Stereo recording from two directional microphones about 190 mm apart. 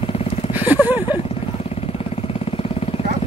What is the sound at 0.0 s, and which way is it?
Vehicle, 30° left (ahead or behind).